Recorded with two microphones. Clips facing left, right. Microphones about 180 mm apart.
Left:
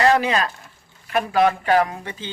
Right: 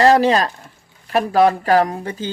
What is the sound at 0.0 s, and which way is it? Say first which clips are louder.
Speech: right 5 dB; 35° right (ahead or behind).